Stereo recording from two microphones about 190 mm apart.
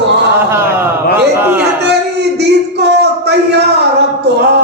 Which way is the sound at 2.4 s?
60° right (ahead or behind).